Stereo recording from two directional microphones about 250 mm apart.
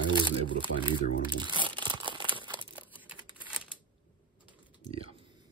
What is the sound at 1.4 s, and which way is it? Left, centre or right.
Crumpling, centre.